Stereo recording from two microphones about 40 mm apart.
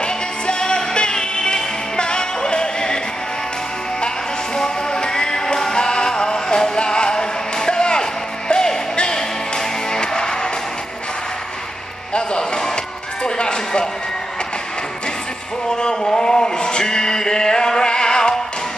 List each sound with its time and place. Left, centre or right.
0.0 s music: left
4.6 s music: centre
12.1 s music: left
15.7 s a sound: centre